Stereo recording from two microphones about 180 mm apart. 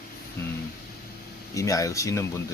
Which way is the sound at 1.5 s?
20° left (ahead or behind).